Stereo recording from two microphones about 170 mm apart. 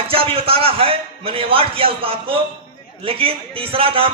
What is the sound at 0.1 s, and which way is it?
A man's voice, 35° right (ahead or behind).